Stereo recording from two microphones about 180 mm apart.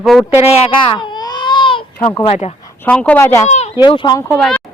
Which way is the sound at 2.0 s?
35° left (ahead or behind).